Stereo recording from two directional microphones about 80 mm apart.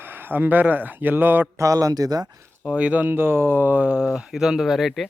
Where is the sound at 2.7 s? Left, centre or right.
Centre.